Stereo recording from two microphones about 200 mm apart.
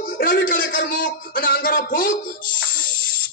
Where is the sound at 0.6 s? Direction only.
65° left (ahead or behind).